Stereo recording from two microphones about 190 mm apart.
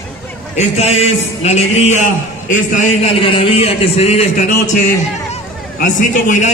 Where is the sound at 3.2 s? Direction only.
30° left (ahead or behind).